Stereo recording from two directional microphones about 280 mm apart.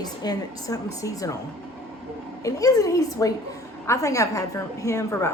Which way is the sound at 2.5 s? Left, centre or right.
Centre.